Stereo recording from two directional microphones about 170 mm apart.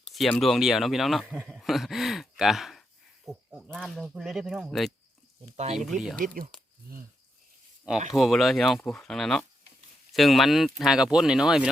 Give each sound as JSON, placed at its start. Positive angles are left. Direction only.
{"t": 0.1, "sound": "speech", "side_deg": 0}
{"t": 5.5, "sound": "speech", "side_deg": -40}
{"t": 6.1, "sound": "speech", "side_deg": -55}
{"t": 8.1, "sound": "speech", "side_deg": 0}